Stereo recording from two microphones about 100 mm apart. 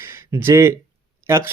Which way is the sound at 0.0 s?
25° right (ahead or behind).